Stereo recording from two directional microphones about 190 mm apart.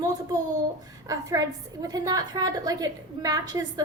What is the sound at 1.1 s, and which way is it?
A woman's voice, 20° right (ahead or behind).